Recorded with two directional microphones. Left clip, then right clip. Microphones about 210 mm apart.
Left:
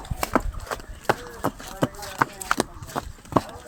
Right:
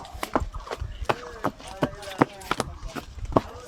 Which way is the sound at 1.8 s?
40° left (ahead or behind).